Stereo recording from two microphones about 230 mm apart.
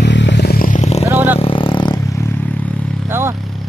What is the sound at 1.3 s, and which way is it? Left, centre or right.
Vehicle, left.